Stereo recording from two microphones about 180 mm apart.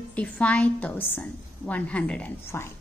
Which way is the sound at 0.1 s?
5° left (ahead or behind).